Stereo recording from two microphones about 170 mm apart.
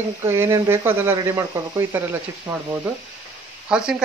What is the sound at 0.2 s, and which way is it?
Speech, 15° right (ahead or behind).